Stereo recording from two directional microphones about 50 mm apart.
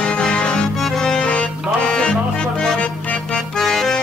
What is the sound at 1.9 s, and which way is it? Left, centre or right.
Music, centre.